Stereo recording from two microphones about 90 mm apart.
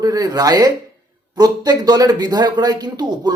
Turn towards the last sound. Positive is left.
turn(degrees=-50)  # may be behind; listen again after turning